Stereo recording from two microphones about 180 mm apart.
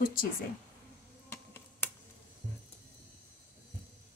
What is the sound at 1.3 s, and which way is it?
Finger snapping, 10° left (ahead or behind).